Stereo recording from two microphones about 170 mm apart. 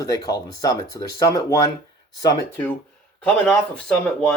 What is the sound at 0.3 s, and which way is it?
Speech, 25° left (ahead or behind).